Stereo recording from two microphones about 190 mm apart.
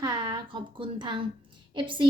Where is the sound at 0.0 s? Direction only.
20° right (ahead or behind).